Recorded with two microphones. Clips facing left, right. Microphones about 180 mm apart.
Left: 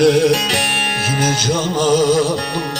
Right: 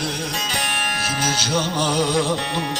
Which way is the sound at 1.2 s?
50° left (ahead or behind).